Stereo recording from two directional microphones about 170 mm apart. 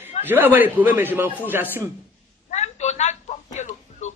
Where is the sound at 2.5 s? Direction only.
40° left (ahead or behind).